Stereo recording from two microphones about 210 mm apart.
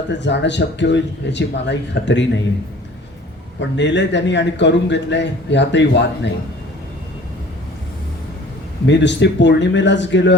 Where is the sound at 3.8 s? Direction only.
60° left (ahead or behind).